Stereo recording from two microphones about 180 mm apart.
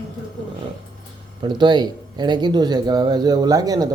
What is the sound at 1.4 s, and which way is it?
Speech, 25° right (ahead or behind).